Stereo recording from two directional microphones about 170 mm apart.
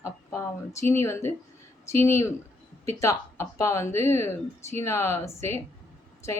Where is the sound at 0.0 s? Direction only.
15° left (ahead or behind).